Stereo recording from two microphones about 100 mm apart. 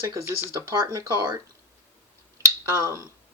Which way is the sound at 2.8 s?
35° left (ahead or behind).